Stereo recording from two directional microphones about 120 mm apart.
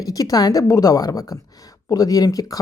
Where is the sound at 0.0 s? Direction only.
30° left (ahead or behind).